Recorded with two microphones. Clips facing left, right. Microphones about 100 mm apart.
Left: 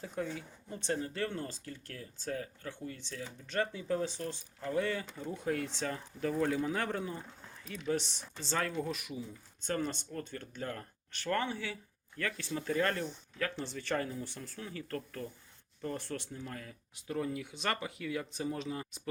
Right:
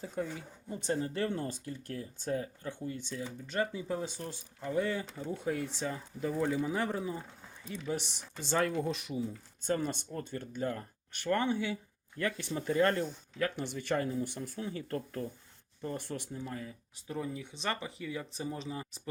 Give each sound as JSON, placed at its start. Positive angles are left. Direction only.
{"t": 0.0, "sound": "speech", "side_deg": -10}
{"t": 0.9, "sound": "speech", "side_deg": -30}
{"t": 5.5, "sound": "speech", "side_deg": -5}
{"t": 9.6, "sound": "speech", "side_deg": -15}
{"t": 13.4, "sound": "speech", "side_deg": -15}
{"t": 17.5, "sound": "speech", "side_deg": -30}